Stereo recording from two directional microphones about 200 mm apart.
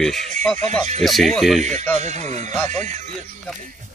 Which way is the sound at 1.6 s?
35° right (ahead or behind).